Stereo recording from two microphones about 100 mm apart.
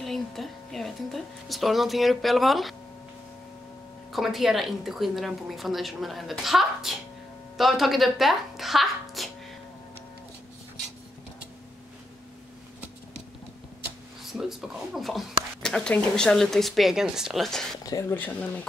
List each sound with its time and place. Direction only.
0.0 s a woman's voice: centre (ahead or behind)
4.1 s a woman's voice: centre (ahead or behind)
14.2 s speech: centre (ahead or behind)
18.1 s speech: 15° left (ahead or behind)